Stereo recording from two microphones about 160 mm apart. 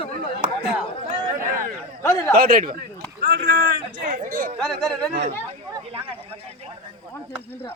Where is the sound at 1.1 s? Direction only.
55° right (ahead or behind).